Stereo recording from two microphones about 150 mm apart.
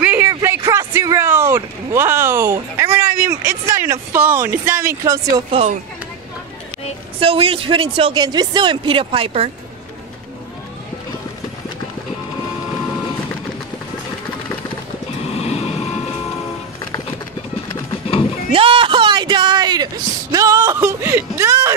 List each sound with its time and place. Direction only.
0.0 s a sound: 10° right (ahead or behind)
3.3 s speech: 15° right (ahead or behind)
5.3 s speech: 45° right (ahead or behind)
7.2 s speech: 40° right (ahead or behind)
15.3 s vehicle: 45° left (ahead or behind)
18.5 s a sound: 35° right (ahead or behind); by 21.7 s 20° right (ahead or behind)